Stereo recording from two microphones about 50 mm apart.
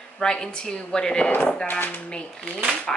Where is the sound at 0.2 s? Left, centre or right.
Centre.